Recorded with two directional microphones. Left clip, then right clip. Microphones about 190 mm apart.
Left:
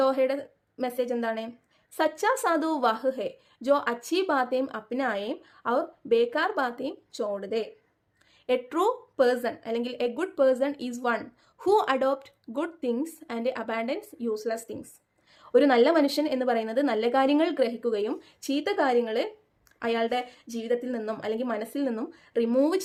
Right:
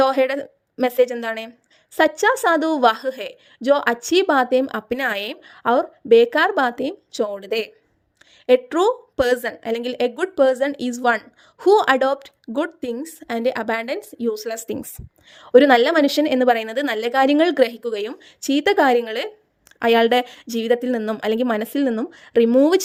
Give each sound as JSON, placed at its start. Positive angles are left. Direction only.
{"t": 0.0, "sound": "a woman's voice", "side_deg": -40}
{"t": 8.4, "sound": "a woman's voice", "side_deg": -35}